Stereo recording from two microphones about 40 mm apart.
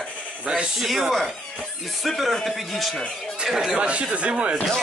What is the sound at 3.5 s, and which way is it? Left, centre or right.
Speech, centre.